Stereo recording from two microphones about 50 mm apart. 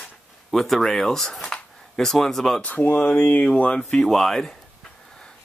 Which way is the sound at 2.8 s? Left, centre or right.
Left.